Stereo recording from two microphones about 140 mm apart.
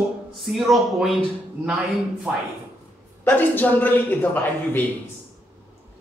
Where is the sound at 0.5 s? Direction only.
Centre (ahead or behind).